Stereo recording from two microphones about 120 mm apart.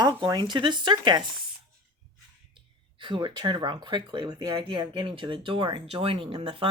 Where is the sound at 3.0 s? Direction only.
45° right (ahead or behind).